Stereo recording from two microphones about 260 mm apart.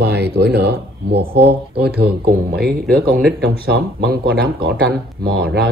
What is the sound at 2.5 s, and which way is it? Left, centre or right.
Speech, right.